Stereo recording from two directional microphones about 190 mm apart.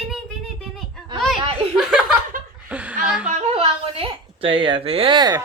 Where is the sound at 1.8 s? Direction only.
5° right (ahead or behind).